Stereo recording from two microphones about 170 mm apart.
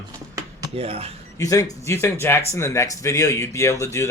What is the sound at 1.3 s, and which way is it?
Speech, 20° left (ahead or behind).